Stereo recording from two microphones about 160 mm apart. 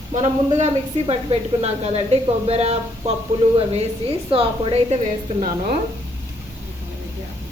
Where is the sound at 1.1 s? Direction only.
40° right (ahead or behind).